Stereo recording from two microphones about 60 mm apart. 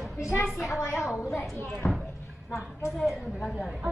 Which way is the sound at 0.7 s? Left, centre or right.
Left.